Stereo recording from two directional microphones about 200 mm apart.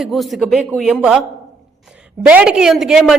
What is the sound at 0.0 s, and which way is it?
A woman's voice, centre (ahead or behind).